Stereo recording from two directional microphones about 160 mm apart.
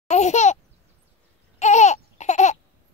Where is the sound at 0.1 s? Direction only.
45° left (ahead or behind).